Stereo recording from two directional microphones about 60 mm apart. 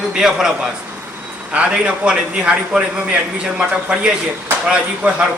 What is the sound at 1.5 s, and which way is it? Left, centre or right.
A man's voice, centre.